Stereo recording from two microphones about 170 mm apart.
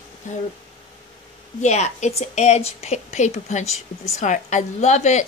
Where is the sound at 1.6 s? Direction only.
40° left (ahead or behind).